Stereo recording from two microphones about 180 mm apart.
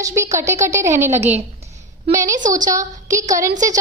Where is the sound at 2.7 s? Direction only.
15° right (ahead or behind).